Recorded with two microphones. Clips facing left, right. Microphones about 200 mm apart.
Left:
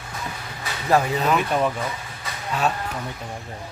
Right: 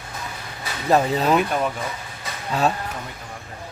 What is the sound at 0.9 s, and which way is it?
Speech, 30° right (ahead or behind).